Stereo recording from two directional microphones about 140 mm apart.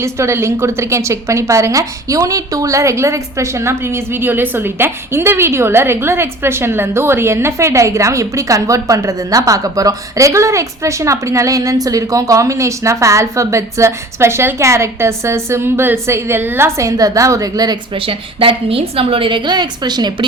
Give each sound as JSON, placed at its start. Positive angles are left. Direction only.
{"t": 0.0, "sound": "a woman's voice", "side_deg": -20}
{"t": 17.9, "sound": "a woman's voice", "side_deg": -40}